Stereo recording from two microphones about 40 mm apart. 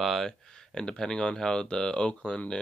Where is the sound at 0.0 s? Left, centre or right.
Centre.